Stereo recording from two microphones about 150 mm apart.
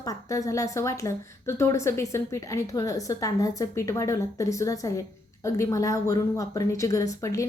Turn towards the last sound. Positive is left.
turn(degrees=20)  # may be behind; listen again after turning